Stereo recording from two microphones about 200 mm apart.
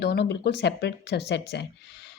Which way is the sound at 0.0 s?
55° left (ahead or behind).